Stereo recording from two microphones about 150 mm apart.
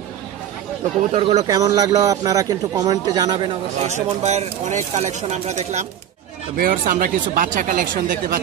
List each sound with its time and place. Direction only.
1.1 s speech: 45° right (ahead or behind)
1.4 s speech: 25° right (ahead or behind)
3.8 s speech: 50° right (ahead or behind)
6.5 s speech: 70° right (ahead or behind)